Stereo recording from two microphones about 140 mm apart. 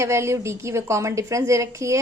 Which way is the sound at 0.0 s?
20° right (ahead or behind).